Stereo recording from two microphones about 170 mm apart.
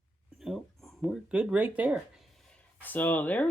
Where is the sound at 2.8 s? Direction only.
10° left (ahead or behind).